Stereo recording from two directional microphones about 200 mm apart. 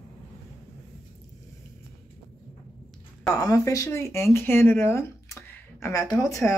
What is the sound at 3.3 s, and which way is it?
Speech, 15° left (ahead or behind).